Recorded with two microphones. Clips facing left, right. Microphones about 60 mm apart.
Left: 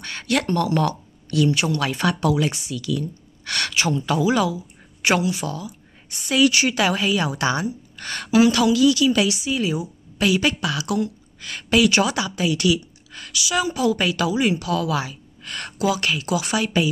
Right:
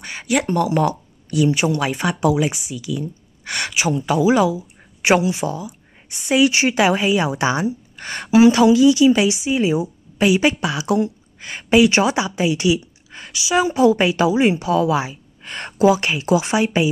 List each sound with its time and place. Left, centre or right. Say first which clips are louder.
0.0 s speech: right 2 dB; centre